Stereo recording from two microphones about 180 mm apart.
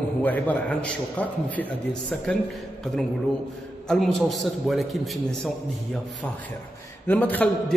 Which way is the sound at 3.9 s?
Centre (ahead or behind).